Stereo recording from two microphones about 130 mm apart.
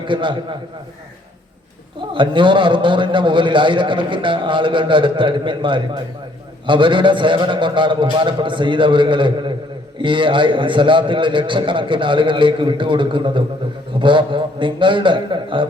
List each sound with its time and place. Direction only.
0.0 s a man's voice: 40° right (ahead or behind)
2.0 s a man's voice: 40° right (ahead or behind)